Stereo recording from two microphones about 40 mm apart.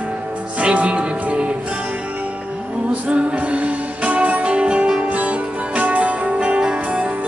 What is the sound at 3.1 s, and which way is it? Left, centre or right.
Music, right.